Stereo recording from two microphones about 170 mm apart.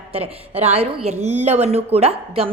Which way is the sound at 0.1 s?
35° right (ahead or behind).